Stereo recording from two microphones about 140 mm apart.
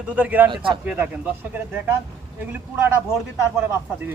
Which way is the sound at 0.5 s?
35° right (ahead or behind).